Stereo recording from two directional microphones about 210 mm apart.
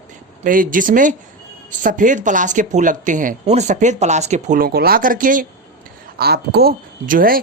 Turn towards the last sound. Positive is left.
turn(degrees=-45)  # may be behind; listen again after turning